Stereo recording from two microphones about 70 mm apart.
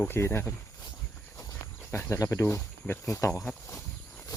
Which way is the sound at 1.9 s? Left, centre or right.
Left.